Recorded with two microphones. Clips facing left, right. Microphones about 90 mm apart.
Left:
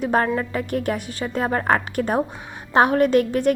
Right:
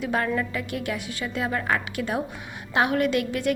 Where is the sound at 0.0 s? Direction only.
40° left (ahead or behind).